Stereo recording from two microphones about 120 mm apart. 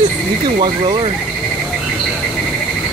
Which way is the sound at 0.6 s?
35° right (ahead or behind).